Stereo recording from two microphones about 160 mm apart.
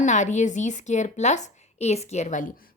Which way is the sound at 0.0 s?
50° left (ahead or behind).